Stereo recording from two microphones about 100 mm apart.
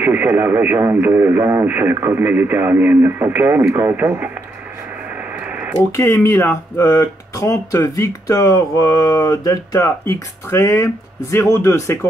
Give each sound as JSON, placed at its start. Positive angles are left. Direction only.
{"t": 0.0, "sound": "speech", "side_deg": -15}
{"t": 5.4, "sound": "radio", "side_deg": -15}
{"t": 5.9, "sound": "speech", "side_deg": 25}
{"t": 6.8, "sound": "speech", "side_deg": 35}